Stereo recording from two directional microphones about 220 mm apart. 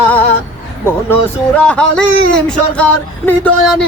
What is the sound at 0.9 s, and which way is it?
Speech, 5° left (ahead or behind).